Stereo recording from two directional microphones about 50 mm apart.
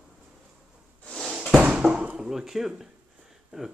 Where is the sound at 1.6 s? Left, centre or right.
Right.